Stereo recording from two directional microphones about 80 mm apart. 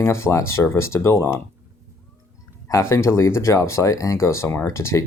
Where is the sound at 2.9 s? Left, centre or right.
Left.